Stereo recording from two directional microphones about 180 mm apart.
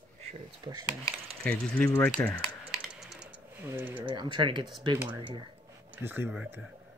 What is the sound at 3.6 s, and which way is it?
Speech, 10° right (ahead or behind).